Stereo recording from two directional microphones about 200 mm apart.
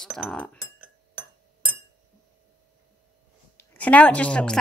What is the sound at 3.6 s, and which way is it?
A woman's voice, 5° left (ahead or behind).